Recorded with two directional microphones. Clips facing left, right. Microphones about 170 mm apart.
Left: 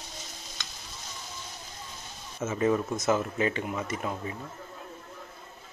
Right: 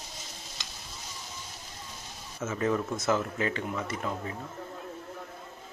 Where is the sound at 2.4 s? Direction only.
20° left (ahead or behind).